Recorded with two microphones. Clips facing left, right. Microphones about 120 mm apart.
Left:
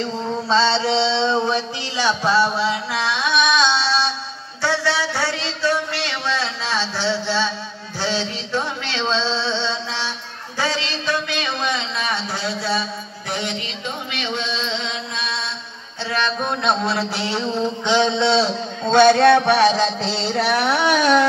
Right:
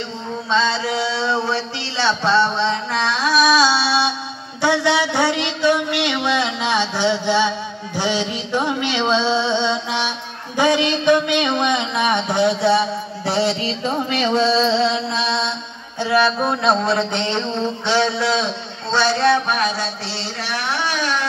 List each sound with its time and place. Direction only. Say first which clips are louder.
0.5 s a sound: left 1 dB; 30° left (ahead or behind); by 12.8 s 25° right (ahead or behind)
13.3 s music: right 7 dB; 30° right (ahead or behind)
16.0 s speech: right 6 dB; 10° right (ahead or behind); by 18.5 s 30° left (ahead or behind)
18.9 s speech: left 5 dB; 55° left (ahead or behind); by 19.8 s 85° left